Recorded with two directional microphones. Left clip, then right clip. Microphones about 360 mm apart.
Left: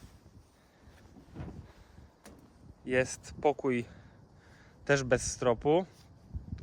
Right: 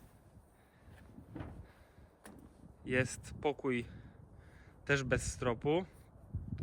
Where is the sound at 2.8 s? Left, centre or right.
Centre.